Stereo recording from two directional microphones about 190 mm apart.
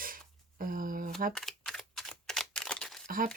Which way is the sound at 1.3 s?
5° left (ahead or behind).